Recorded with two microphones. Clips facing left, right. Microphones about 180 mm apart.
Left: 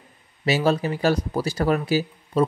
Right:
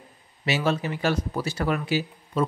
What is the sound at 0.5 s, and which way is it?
Speech, 40° left (ahead or behind).